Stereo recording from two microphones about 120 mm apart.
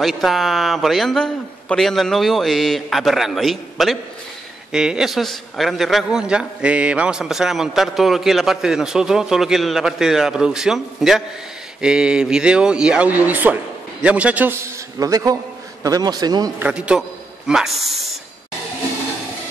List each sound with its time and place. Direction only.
0.0 s a man's voice: centre (ahead or behind); by 16.5 s 35° right (ahead or behind)
16.6 s a man's voice: 10° right (ahead or behind)